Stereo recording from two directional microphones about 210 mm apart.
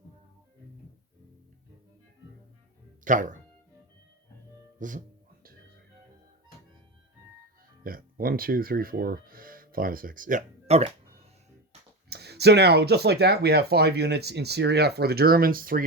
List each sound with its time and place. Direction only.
3.0 s speech: 35° right (ahead or behind)
4.8 s music: 40° right (ahead or behind)
7.9 s speech: 45° right (ahead or behind)
12.0 s speech: 50° right (ahead or behind)